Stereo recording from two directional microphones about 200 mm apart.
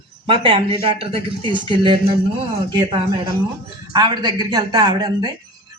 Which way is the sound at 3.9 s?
20° right (ahead or behind).